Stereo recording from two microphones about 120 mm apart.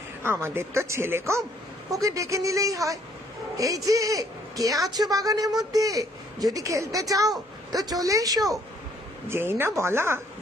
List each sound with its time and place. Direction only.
0.2 s a woman's voice: 20° right (ahead or behind)